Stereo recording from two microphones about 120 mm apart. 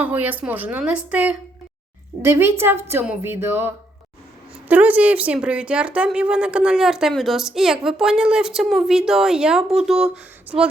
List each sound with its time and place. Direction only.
0.0 s a woman's voice: 15° right (ahead or behind)